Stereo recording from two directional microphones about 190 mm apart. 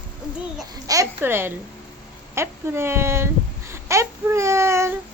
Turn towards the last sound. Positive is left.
turn(degrees=-15)  # may be behind; listen again after turning